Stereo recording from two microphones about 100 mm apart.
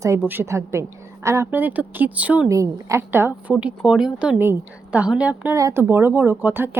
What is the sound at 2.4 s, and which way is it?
A woman's voice, 30° right (ahead or behind).